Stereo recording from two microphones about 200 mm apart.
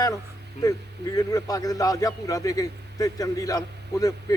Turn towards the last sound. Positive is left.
turn(degrees=20)  # may be behind; listen again after turning